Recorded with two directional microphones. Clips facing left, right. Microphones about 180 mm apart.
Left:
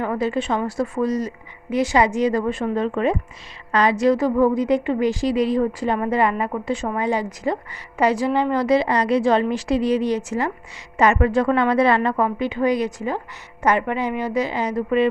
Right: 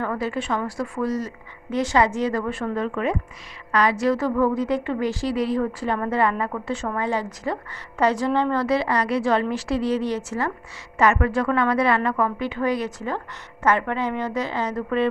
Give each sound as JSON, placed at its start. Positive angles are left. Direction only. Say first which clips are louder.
{"t": 0.0, "sound": "a woman's voice", "louder": "left 4 dB", "side_deg": 20}